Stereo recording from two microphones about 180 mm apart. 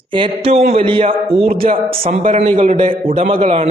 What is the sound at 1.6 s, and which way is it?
A man's voice, 40° right (ahead or behind).